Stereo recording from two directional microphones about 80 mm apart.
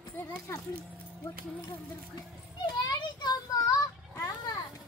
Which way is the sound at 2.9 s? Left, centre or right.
Left.